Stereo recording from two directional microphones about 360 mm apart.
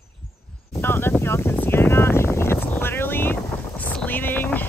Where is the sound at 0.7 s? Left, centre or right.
Centre.